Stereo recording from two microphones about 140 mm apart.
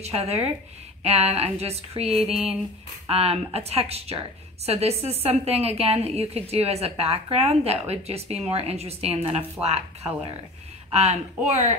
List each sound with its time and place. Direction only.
0.0 s a woman's voice: 50° right (ahead or behind)